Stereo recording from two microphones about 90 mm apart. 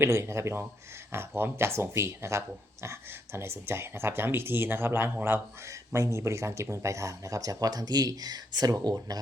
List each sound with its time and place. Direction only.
0.0 s speech: 30° right (ahead or behind); by 9.2 s 45° right (ahead or behind)